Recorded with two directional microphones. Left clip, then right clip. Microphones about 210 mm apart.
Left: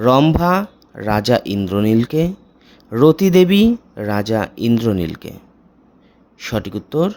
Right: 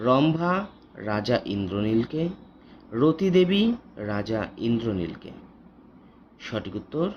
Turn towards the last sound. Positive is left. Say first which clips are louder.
# left 9 dB
turn(degrees=45)  # may be behind; listen again after turning